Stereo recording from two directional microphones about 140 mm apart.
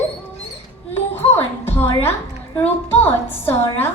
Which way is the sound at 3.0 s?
15° left (ahead or behind).